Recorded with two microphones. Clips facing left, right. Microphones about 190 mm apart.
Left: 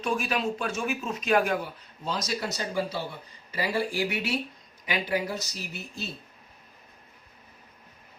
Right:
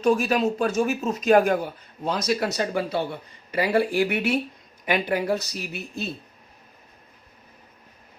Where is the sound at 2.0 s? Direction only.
60° right (ahead or behind).